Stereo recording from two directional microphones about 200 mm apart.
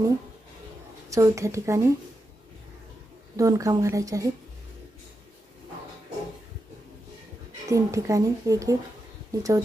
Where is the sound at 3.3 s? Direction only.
15° right (ahead or behind).